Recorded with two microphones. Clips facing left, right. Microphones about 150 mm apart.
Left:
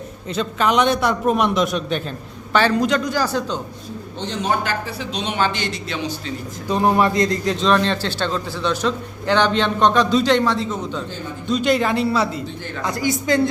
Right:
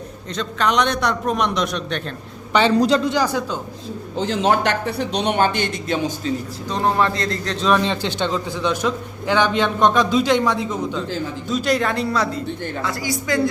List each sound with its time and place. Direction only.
0.3 s a man's voice: 5° left (ahead or behind)
2.5 s a man's voice: 20° right (ahead or behind)
2.7 s speech: 35° right (ahead or behind); by 3.6 s 10° right (ahead or behind)
4.3 s speech: 90° right; by 6.3 s 45° right (ahead or behind)
6.7 s a man's voice: 10° left (ahead or behind)
7.5 s a man's voice: centre (ahead or behind)
7.8 s a man's voice: 15° right (ahead or behind)
11.4 s a man's voice: centre (ahead or behind)
12.8 s a woman's voice: 20° left (ahead or behind)